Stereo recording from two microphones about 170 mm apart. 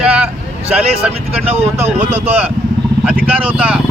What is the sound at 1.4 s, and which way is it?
Speech, 40° right (ahead or behind).